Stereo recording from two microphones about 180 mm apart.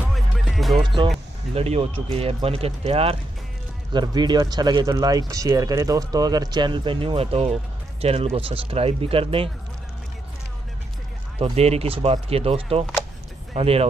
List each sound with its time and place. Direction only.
0.1 s music: centre (ahead or behind)
1.5 s speech: 35° right (ahead or behind)
3.9 s speech: 25° right (ahead or behind)
11.3 s speech: 35° right (ahead or behind)